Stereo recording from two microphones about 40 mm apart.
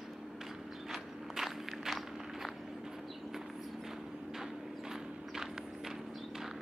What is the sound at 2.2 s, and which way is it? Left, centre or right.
Walk, centre.